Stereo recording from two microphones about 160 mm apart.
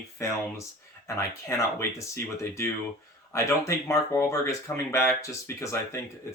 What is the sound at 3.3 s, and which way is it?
Speech, 20° left (ahead or behind).